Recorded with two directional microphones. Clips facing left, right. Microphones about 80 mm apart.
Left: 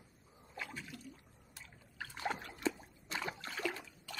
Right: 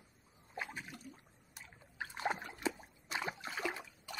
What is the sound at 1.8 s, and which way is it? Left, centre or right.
Trickle, right.